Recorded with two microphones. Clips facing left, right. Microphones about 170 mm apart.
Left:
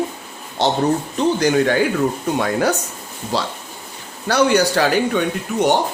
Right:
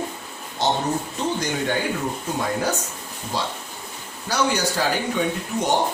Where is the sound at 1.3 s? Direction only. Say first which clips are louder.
Left 10 dB; 85° left.